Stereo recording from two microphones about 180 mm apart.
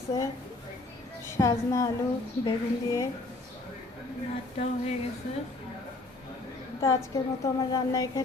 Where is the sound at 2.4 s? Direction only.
15° left (ahead or behind).